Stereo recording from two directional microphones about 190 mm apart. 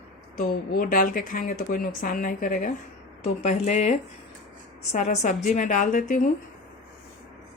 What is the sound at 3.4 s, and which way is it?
Speech, 35° left (ahead or behind).